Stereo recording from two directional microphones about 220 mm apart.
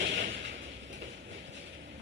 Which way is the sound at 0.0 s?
55° right (ahead or behind).